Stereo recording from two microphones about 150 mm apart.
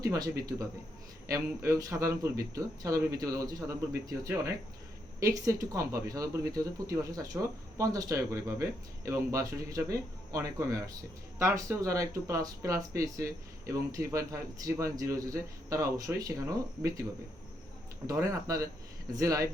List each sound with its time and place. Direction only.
0.0 s speech: 25° right (ahead or behind)
18.0 s speech: 20° right (ahead or behind)